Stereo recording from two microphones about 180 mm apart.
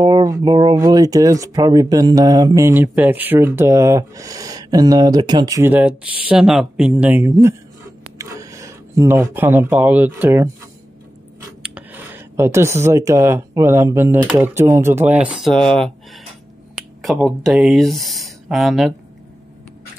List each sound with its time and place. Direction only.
0.0 s speech: 20° right (ahead or behind)
11.6 s speech: 10° right (ahead or behind)